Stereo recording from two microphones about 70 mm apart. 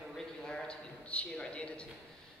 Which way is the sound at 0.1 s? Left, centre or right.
Centre.